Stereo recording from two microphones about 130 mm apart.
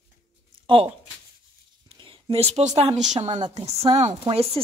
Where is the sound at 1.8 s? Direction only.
40° right (ahead or behind).